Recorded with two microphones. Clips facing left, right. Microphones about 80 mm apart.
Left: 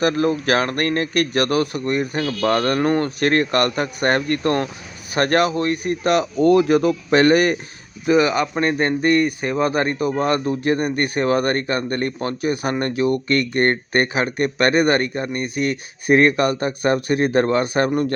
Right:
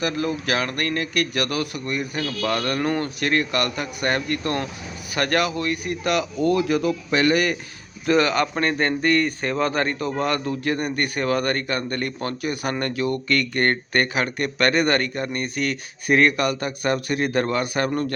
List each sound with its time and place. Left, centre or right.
0.0 s speech: left
8.0 s speech: centre; by 17.9 s left